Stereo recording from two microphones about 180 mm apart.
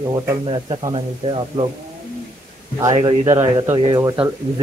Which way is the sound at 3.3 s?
20° right (ahead or behind).